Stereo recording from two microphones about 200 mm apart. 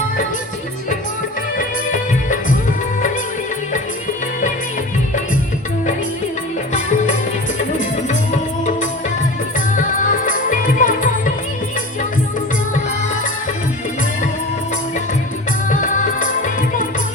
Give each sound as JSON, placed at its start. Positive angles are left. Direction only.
{"t": 6.7, "sound": "music", "side_deg": 40}
{"t": 8.3, "sound": "music", "side_deg": 35}
{"t": 15.7, "sound": "music", "side_deg": 40}